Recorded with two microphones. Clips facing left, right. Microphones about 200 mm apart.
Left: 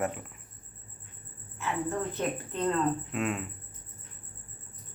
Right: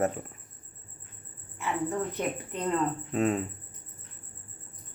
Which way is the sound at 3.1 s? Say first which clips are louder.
Right 5 dB; 35° right (ahead or behind).